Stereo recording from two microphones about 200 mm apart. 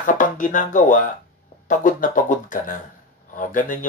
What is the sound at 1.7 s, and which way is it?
Speech, 40° left (ahead or behind).